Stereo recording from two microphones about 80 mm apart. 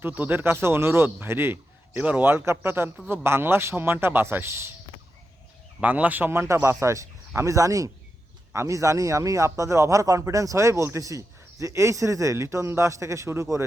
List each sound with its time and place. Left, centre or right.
0.0 s a man's voice: right
2.0 s a man's voice: centre
5.8 s a man's voice: centre
6.3 s a man's voice: right